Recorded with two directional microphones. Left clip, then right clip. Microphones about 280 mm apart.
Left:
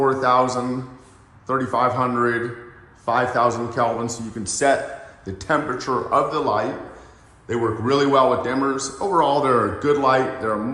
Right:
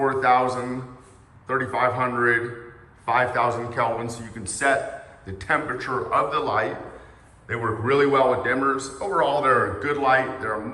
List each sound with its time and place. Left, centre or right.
0.1 s a man's voice: centre